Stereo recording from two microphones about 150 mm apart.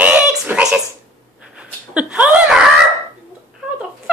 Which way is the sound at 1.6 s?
10° right (ahead or behind).